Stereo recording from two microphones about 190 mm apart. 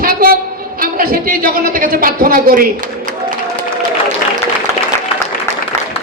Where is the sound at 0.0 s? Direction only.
50° right (ahead or behind).